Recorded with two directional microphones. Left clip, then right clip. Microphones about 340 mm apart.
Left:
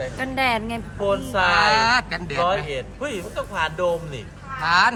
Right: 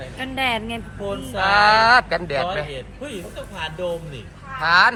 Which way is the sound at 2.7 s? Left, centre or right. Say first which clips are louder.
Left 4 dB; centre.